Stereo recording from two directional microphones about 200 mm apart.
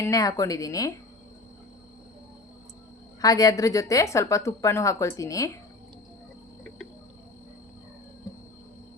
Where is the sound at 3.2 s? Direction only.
15° left (ahead or behind).